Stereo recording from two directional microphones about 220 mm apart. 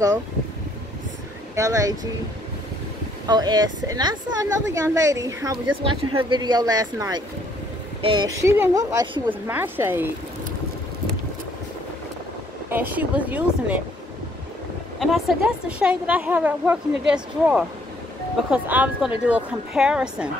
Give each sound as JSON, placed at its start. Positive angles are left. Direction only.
{"t": 1.5, "sound": "speech", "side_deg": -15}
{"t": 3.3, "sound": "a woman's voice", "side_deg": -20}
{"t": 9.3, "sound": "a woman's voice", "side_deg": -10}
{"t": 12.6, "sound": "a woman's voice", "side_deg": -10}
{"t": 15.0, "sound": "a woman's voice", "side_deg": 0}